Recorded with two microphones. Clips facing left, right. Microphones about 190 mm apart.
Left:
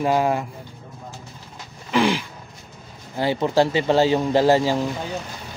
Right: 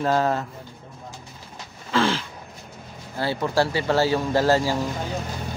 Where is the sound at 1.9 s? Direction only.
15° left (ahead or behind).